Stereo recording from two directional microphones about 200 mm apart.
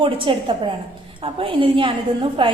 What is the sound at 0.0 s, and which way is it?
A woman's voice, 25° right (ahead or behind).